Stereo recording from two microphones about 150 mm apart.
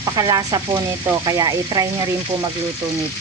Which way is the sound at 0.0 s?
25° right (ahead or behind).